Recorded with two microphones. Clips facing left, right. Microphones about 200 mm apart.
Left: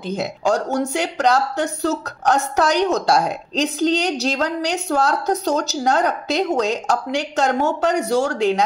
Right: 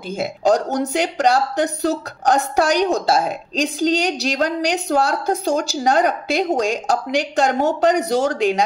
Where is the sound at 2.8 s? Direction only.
30° right (ahead or behind).